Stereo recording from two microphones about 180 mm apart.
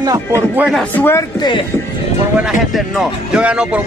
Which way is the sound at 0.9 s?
10° left (ahead or behind).